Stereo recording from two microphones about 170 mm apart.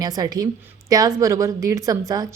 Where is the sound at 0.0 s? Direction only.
20° right (ahead or behind).